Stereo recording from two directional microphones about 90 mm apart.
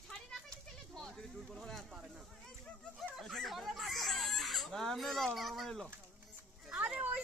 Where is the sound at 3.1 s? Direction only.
Centre (ahead or behind).